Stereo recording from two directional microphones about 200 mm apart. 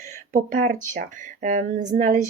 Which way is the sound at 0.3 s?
45° right (ahead or behind).